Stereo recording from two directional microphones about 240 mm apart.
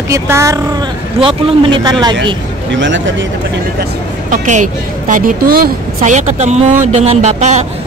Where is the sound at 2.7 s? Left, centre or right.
Right.